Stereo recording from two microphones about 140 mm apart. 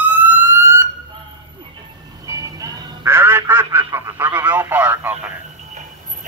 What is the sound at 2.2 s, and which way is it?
Music, 20° right (ahead or behind).